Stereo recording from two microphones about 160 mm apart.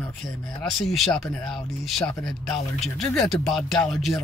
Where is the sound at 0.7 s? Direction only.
Centre (ahead or behind).